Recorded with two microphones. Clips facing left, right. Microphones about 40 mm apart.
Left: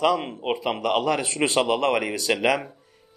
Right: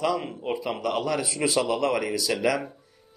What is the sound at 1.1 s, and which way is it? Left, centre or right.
Speech, left.